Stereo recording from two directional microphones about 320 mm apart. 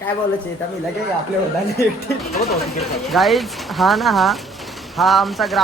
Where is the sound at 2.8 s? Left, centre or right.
Centre.